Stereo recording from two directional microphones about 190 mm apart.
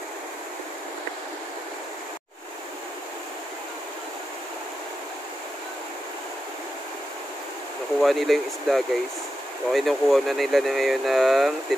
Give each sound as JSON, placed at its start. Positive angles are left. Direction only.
{"t": 8.0, "sound": "speech", "side_deg": 0}